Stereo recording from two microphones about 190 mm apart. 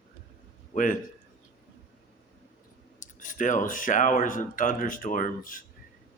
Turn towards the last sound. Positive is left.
turn(degrees=45)  # may be behind; listen again after turning